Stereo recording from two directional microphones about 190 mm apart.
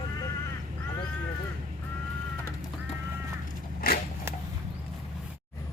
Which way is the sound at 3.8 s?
50° left (ahead or behind).